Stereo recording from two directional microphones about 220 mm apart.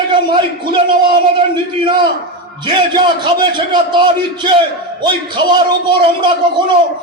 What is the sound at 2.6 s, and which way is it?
A man's voice, 20° right (ahead or behind).